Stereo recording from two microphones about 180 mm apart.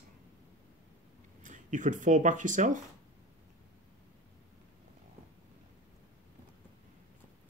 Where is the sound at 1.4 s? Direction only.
45° right (ahead or behind).